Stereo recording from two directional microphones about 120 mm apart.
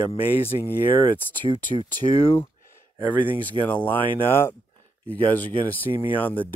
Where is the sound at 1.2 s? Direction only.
15° left (ahead or behind).